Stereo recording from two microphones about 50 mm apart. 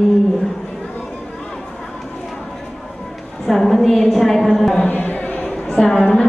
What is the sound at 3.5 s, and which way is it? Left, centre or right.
A woman's voice, centre.